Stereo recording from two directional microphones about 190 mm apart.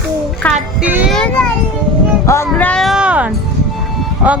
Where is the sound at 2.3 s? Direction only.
10° left (ahead or behind); by 3.3 s 5° right (ahead or behind).